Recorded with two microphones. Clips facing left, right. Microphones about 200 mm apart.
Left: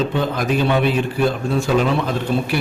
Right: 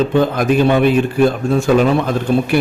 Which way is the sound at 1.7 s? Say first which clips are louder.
Right 5 dB; 55° right (ahead or behind).